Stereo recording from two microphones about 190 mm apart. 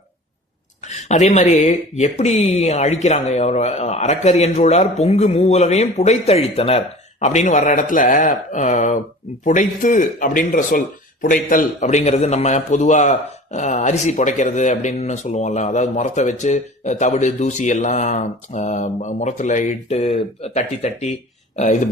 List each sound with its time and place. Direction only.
0.9 s speech: 40° left (ahead or behind)